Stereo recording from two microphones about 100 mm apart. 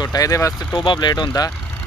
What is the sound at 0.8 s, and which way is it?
Speech, 50° left (ahead or behind).